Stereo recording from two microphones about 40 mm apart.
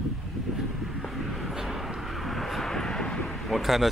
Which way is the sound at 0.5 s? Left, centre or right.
Centre.